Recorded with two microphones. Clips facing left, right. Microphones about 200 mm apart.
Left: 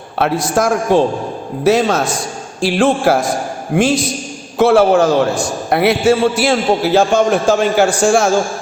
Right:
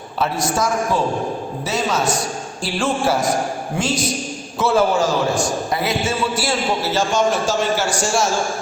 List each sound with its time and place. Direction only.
0.2 s a man's voice: 60° left (ahead or behind)
2.6 s a man's voice: 75° left (ahead or behind); by 3.9 s 55° left (ahead or behind)
4.5 s a man's voice: 65° left (ahead or behind)